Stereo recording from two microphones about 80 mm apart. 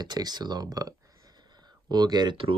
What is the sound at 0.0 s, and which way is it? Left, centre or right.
Speech, right.